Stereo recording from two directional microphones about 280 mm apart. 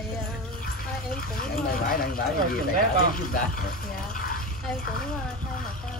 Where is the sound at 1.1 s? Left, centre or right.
Left.